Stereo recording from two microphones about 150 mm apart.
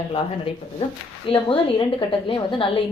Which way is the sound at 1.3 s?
35° left (ahead or behind).